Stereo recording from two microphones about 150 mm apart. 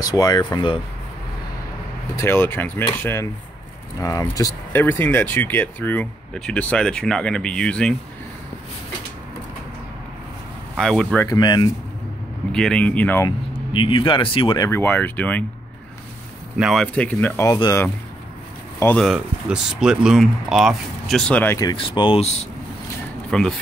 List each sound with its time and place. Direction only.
0.0 s speech: 25° left (ahead or behind)
2.1 s speech: 15° left (ahead or behind)
10.8 s speech: 5° left (ahead or behind)
11.2 s speech: 30° left (ahead or behind)
12.5 s speech: 5° left (ahead or behind)
13.7 s speech: 35° left (ahead or behind)
14.6 s speech: 15° left (ahead or behind)
16.5 s speech: centre (ahead or behind)
17.6 s speech: 25° left (ahead or behind)
18.9 s speech: 5° right (ahead or behind)
21.7 s speech: 35° left (ahead or behind)
23.3 s speech: 5° left (ahead or behind)